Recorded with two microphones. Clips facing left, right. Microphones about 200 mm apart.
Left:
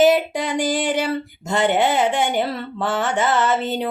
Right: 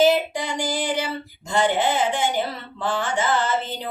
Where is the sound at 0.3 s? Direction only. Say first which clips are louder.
Left 5 dB; 60° left (ahead or behind).